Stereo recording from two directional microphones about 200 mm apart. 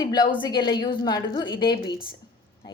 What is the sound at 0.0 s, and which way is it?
Speech, 20° left (ahead or behind).